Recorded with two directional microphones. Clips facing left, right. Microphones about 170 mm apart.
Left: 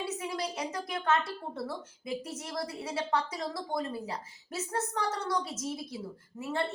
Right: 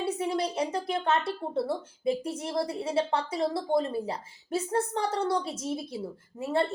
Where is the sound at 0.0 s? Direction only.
30° right (ahead or behind).